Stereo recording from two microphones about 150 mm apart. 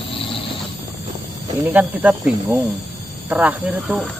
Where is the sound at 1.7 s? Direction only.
5° right (ahead or behind).